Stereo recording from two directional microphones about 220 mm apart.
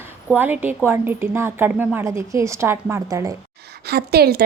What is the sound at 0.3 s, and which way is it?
A woman's voice, 10° right (ahead or behind).